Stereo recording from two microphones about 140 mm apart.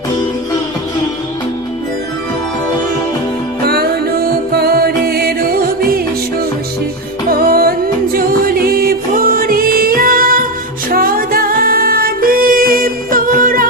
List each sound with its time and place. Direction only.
3.7 s music: 90° right
7.3 s music: 90° right